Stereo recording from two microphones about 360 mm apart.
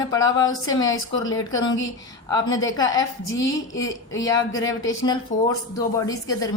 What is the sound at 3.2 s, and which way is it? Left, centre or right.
Speech, left.